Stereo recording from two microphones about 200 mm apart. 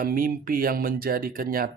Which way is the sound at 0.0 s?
45° right (ahead or behind).